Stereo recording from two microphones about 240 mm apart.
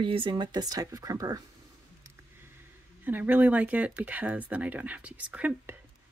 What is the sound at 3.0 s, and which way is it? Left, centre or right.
Speech, centre.